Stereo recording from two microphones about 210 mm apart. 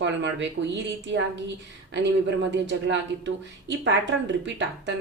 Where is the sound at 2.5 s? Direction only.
60° right (ahead or behind).